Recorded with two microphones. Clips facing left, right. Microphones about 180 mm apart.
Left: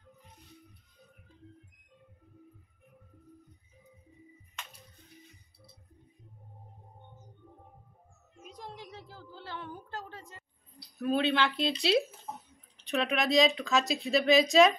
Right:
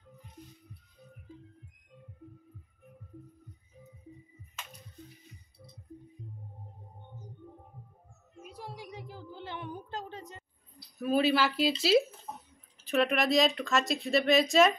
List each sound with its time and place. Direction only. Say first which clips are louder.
8.5 s a sound: right 1 dB; 10° right (ahead or behind)
11.0 s speech: right 2 dB; 5° right (ahead or behind)
12.7 s speech: right 3 dB; centre (ahead or behind)